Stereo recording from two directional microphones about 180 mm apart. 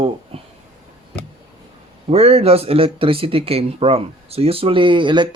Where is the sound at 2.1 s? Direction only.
35° right (ahead or behind).